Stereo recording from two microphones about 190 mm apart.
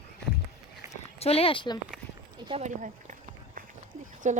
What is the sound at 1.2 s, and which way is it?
Speech, 30° left (ahead or behind).